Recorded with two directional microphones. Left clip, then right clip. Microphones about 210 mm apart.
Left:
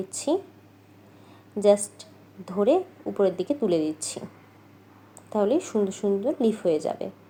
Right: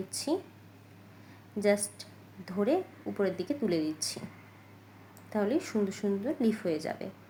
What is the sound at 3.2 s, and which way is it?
Speech, 15° left (ahead or behind).